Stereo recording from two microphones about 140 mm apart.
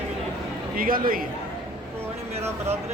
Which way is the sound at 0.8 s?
90° right.